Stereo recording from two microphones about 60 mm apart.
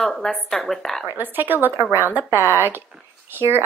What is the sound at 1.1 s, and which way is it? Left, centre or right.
A woman's voice, right.